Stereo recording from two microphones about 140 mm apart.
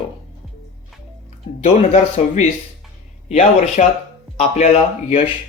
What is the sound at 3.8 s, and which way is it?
Speech, 60° left (ahead or behind).